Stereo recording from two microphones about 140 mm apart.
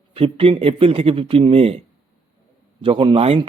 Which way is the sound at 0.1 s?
40° right (ahead or behind).